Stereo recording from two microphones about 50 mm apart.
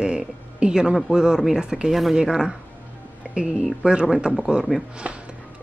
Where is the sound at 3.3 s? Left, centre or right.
Left.